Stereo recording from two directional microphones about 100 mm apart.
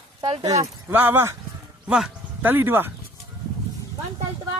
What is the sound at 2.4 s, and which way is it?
Speech, 20° right (ahead or behind).